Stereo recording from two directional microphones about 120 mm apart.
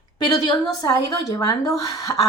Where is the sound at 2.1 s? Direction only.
25° left (ahead or behind).